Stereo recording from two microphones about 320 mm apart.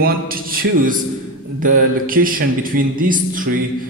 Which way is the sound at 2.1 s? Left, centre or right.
Right.